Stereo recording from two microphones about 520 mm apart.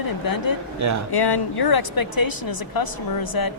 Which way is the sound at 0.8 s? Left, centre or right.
Right.